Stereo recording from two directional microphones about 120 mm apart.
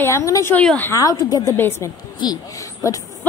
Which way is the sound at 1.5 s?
20° left (ahead or behind).